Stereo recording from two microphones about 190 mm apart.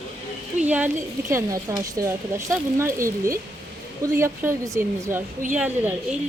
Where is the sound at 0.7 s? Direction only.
10° right (ahead or behind).